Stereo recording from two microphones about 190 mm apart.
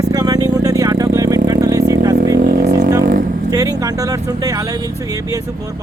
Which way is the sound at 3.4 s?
20° right (ahead or behind).